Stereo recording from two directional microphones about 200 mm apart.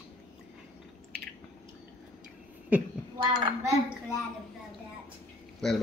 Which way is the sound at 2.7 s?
10° right (ahead or behind).